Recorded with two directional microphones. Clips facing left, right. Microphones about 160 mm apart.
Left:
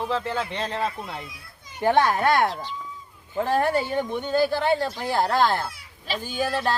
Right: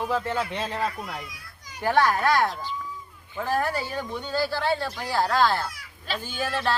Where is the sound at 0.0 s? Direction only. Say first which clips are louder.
Even; 10° right (ahead or behind).